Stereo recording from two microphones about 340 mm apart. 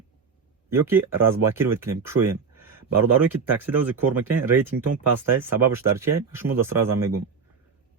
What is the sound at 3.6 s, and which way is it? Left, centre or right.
Speech, centre.